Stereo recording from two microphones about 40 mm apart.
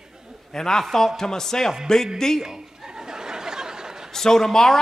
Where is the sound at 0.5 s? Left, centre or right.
Centre.